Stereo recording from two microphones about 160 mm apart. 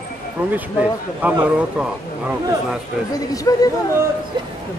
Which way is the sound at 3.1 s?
20° left (ahead or behind).